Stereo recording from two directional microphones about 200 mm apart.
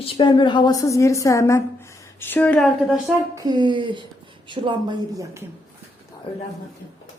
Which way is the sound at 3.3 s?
20° right (ahead or behind).